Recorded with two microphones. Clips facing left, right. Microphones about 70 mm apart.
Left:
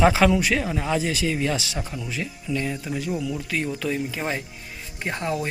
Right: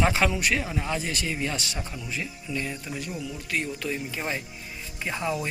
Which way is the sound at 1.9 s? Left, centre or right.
Left.